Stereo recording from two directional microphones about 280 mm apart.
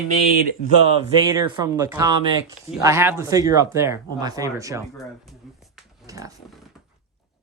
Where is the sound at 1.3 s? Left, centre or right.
Centre.